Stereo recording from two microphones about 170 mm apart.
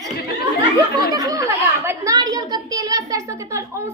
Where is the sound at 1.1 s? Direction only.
20° right (ahead or behind).